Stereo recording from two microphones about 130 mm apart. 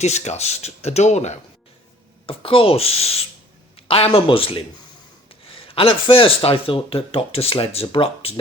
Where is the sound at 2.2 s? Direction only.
45° left (ahead or behind).